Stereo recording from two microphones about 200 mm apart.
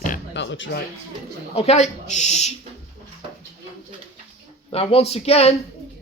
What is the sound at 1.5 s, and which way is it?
Speech, 30° left (ahead or behind).